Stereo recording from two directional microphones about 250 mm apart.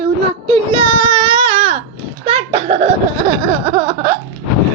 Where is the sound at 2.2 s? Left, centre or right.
Right.